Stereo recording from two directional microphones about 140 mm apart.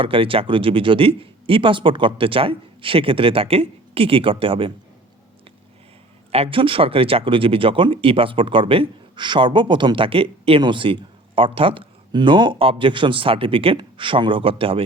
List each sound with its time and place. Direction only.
0.0 s speech: 40° right (ahead or behind)
6.3 s speech: 40° right (ahead or behind)